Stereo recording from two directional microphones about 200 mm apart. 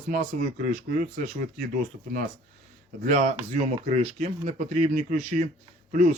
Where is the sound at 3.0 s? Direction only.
40° right (ahead or behind).